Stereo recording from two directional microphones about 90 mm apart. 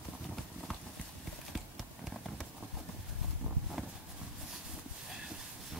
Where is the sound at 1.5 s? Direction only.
Centre (ahead or behind).